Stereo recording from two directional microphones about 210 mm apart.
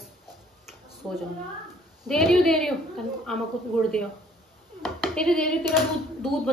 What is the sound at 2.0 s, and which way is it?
Speech, centre (ahead or behind).